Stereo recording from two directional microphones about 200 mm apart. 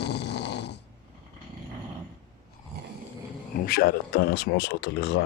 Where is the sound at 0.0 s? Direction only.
55° left (ahead or behind).